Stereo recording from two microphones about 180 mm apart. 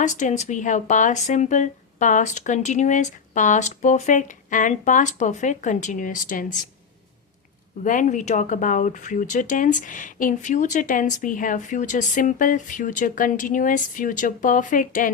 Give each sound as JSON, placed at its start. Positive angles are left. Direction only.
{"t": 0.0, "sound": "speech", "side_deg": 45}
{"t": 7.9, "sound": "speech", "side_deg": 45}